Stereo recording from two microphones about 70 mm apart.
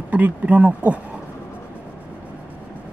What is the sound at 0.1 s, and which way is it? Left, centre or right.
Speech, right.